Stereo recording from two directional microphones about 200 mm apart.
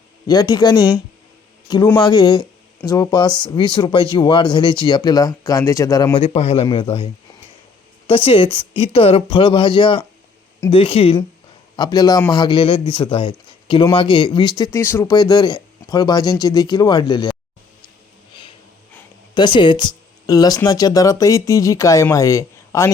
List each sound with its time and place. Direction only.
0.3 s speech: 20° left (ahead or behind)
8.0 s speech: 25° left (ahead or behind)
19.3 s speech: 20° left (ahead or behind)